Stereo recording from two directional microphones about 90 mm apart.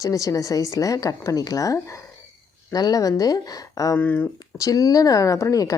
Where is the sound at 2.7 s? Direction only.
45° left (ahead or behind).